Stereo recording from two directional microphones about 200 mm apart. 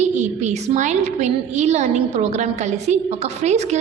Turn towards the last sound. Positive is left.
turn(degrees=-35)  # may be behind; listen again after turning